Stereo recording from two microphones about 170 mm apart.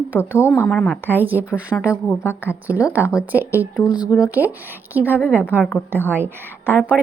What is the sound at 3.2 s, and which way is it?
A woman's voice, 10° right (ahead or behind).